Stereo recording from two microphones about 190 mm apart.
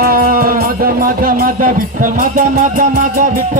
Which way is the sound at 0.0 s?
50° right (ahead or behind).